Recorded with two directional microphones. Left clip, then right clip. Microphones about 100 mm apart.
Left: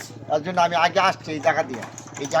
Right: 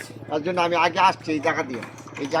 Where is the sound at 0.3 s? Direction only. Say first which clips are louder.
Left 2 dB; 70° left (ahead or behind).